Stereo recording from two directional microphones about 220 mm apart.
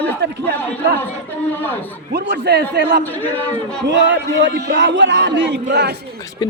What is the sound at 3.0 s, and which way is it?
Speech, 10° left (ahead or behind).